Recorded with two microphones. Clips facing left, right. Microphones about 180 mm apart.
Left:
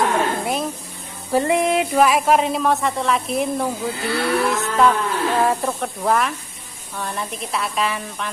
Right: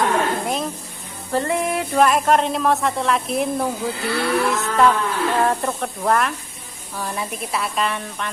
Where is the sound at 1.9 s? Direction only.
5° left (ahead or behind).